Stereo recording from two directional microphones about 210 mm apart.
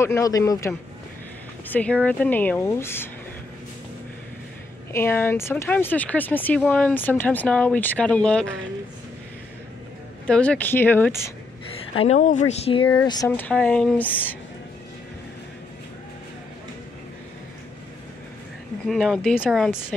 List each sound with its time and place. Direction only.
0.0 s speech: 15° left (ahead or behind)
4.9 s speech: 10° left (ahead or behind)
10.2 s speech: 5° left (ahead or behind)
11.9 s speech: 30° left (ahead or behind)
13.4 s speech: 5° left (ahead or behind)
18.9 s speech: centre (ahead or behind)